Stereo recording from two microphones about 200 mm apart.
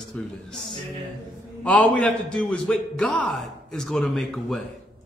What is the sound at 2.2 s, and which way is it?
A man's voice, 5° left (ahead or behind).